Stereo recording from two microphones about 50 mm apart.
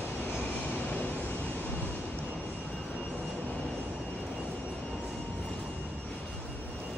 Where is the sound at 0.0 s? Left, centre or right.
Left.